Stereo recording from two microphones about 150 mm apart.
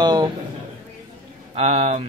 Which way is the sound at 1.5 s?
45° right (ahead or behind).